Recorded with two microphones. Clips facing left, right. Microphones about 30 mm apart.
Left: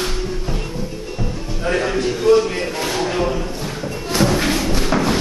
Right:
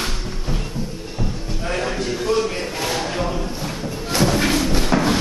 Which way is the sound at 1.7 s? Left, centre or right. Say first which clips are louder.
Left 5 dB; centre.